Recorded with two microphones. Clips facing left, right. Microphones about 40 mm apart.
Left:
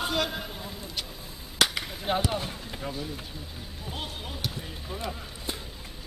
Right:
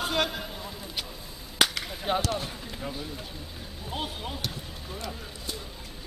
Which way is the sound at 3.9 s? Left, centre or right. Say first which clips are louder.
Right 3 dB; centre.